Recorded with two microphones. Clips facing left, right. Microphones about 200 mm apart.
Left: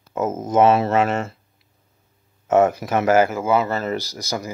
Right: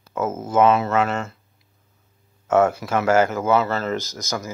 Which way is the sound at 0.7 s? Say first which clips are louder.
Left 2 dB; 30° left (ahead or behind).